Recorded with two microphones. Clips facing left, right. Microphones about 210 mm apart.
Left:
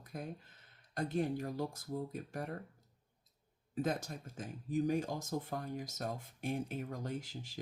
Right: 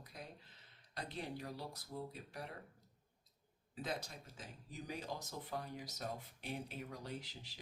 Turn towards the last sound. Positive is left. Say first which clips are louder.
# left 6 dB
turn(degrees=50)  # may be behind; listen again after turning